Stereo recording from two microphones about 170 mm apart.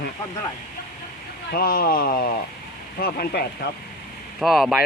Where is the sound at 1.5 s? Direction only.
60° left (ahead or behind).